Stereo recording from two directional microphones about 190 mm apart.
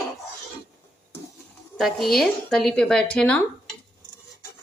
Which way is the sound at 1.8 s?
Centre (ahead or behind).